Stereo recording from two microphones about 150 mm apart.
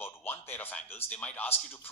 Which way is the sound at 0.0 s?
15° left (ahead or behind).